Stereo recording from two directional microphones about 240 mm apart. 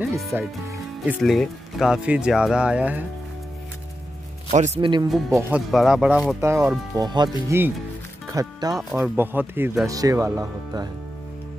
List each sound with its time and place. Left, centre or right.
0.2 s speech: centre
4.5 s speech: right
5.3 s speech: centre
7.0 s speech: centre